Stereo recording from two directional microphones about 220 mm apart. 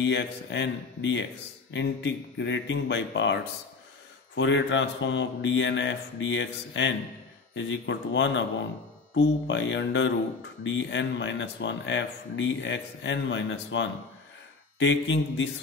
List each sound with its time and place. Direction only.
0.0 s speech: 55° left (ahead or behind)
4.4 s speech: 55° left (ahead or behind)